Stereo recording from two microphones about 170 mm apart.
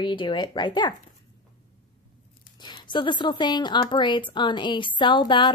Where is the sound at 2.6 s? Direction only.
30° left (ahead or behind).